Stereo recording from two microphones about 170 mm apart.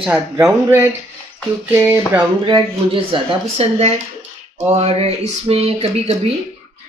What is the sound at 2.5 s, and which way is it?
Speech, 30° right (ahead or behind).